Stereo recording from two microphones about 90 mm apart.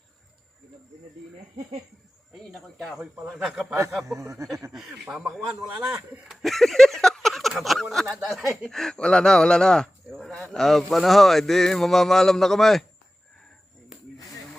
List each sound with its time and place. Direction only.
2.4 s speech: 5° left (ahead or behind)
4.1 s speech: 35° right (ahead or behind)
4.7 s speech: 5° right (ahead or behind)